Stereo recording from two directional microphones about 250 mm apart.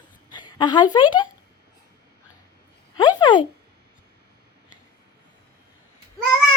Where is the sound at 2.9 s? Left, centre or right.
Centre.